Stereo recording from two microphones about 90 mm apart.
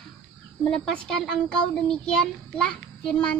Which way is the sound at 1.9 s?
10° left (ahead or behind).